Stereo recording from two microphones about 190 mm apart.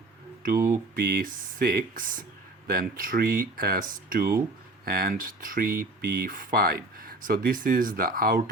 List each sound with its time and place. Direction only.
0.4 s speech: 50° right (ahead or behind)